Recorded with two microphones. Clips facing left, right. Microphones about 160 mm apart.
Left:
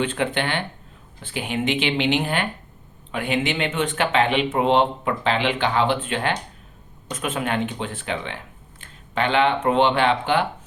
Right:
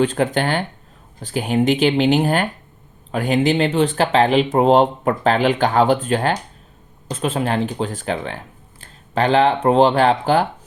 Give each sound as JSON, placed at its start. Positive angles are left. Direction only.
{"t": 0.0, "sound": "speech", "side_deg": -40}